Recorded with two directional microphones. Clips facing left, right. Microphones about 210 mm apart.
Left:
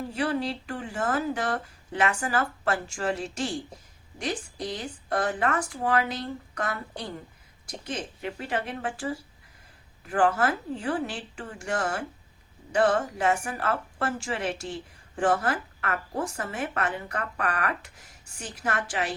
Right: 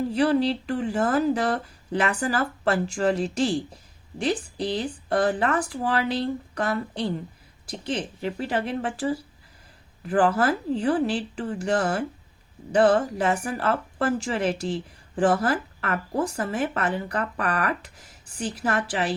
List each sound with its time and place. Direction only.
0.1 s speech: 35° right (ahead or behind)